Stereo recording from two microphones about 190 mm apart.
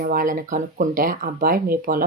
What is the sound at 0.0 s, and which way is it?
Speech, 45° right (ahead or behind).